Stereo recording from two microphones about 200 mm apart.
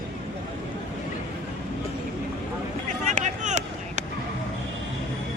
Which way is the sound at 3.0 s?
35° right (ahead or behind).